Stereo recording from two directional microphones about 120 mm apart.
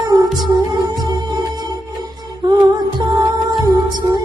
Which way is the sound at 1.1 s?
40° right (ahead or behind).